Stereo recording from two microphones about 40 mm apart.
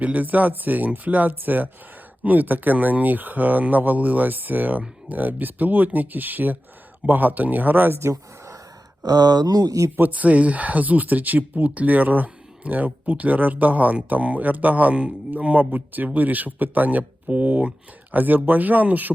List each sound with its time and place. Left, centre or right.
0.0 s speech: right
10.0 s speech: right
18.1 s speech: right